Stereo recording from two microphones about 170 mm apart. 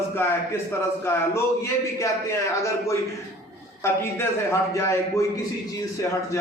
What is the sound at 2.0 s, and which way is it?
A man's voice, 15° left (ahead or behind).